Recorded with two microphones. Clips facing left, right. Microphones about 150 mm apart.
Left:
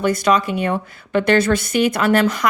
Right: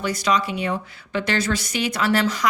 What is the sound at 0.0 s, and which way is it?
A woman's voice, 55° left (ahead or behind).